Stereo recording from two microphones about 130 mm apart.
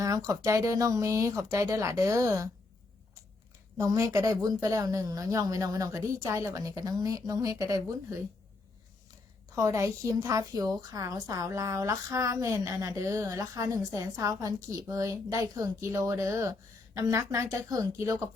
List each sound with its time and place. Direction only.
0.0 s a woman's voice: 25° right (ahead or behind)
3.8 s a woman's voice: 25° right (ahead or behind)
9.6 s a woman's voice: 25° right (ahead or behind)